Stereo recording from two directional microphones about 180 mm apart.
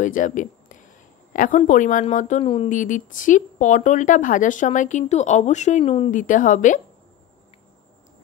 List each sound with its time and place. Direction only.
0.0 s a woman's voice: 45° left (ahead or behind)
2.4 s speech: 30° left (ahead or behind)
2.7 s speech: 45° left (ahead or behind)